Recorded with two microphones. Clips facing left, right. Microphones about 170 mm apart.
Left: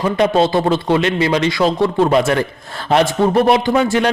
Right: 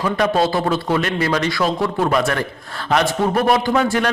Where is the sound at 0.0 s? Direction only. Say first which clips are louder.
Left 3 dB; 25° left (ahead or behind).